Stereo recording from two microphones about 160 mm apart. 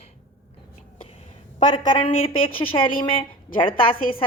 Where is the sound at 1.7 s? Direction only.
30° left (ahead or behind).